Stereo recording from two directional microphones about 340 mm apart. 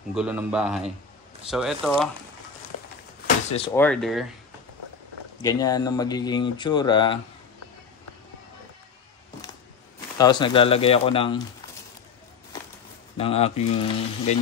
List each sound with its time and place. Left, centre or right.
0.1 s speech: centre
3.4 s speech: centre
3.7 s speech: centre
5.4 s speech: centre
10.1 s speech: centre
13.2 s speech: centre